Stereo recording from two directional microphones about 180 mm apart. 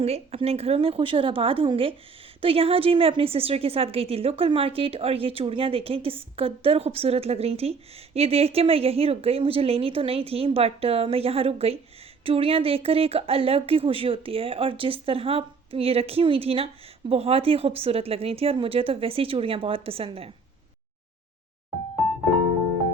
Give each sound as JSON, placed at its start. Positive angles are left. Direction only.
{"t": 0.0, "sound": "a woman's voice", "side_deg": -35}